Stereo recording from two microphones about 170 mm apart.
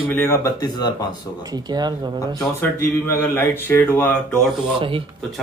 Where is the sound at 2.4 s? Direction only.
15° left (ahead or behind).